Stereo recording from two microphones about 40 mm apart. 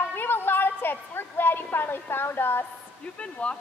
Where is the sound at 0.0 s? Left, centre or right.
Left.